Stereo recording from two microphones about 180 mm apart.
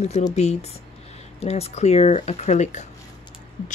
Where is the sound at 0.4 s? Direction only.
35° left (ahead or behind).